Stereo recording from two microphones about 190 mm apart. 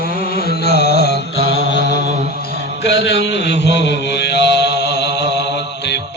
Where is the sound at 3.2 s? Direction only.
65° left (ahead or behind).